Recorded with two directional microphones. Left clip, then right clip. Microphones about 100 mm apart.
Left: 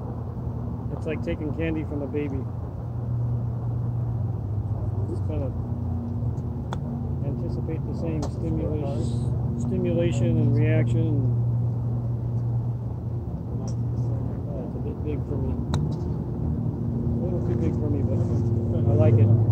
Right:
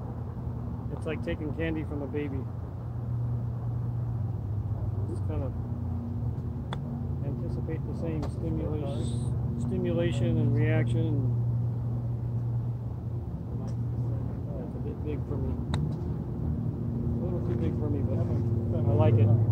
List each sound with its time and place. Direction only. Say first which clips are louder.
1.0 s speech: left 4 dB; 15° left (ahead or behind)
8.0 s speech: left 5 dB; 10° left (ahead or behind)
17.6 s speech: left 5 dB; 15° left (ahead or behind)
18.9 s speech: left 4 dB; 30° left (ahead or behind)